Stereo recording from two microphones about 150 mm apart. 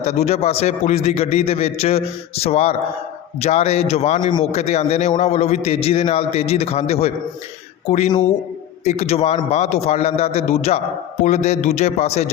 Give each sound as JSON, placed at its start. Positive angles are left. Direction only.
{"t": 0.0, "sound": "a man's voice", "side_deg": 45}